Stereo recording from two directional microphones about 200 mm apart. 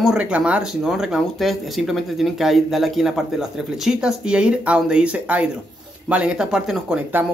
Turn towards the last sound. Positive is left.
turn(degrees=-5)  # may be behind; listen again after turning